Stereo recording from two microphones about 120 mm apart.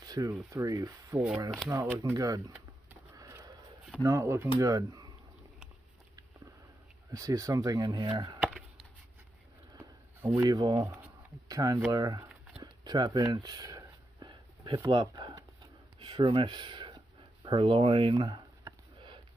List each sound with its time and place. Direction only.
0.0 s rub: 30° right (ahead or behind)
0.5 s speech: 30° right (ahead or behind)
4.0 s speech: 25° right (ahead or behind)
7.1 s speech: 30° right (ahead or behind)
9.8 s a sound: 25° right (ahead or behind)
10.8 s speech: 15° right (ahead or behind)
11.4 s speech: 30° right (ahead or behind)
14.2 s a sound: 40° right (ahead or behind)
14.9 s speech: 40° right (ahead or behind)
18.7 s a sound: 45° right (ahead or behind)